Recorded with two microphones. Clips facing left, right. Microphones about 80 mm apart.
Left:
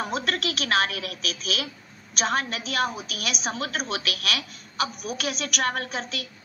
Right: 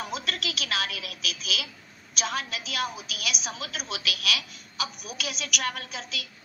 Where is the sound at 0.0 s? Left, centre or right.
Left.